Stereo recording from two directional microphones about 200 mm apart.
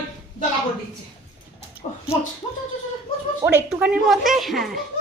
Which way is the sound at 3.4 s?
10° right (ahead or behind).